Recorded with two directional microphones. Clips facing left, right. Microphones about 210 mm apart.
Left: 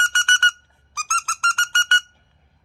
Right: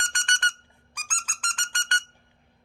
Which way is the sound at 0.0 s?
15° right (ahead or behind).